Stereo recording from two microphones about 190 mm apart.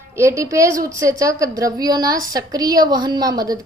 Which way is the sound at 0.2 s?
15° right (ahead or behind).